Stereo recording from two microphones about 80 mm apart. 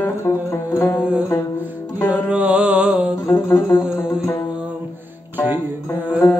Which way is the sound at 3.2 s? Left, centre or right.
Left.